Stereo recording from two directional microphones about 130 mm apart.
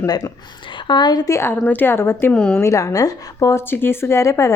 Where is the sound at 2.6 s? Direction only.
25° left (ahead or behind).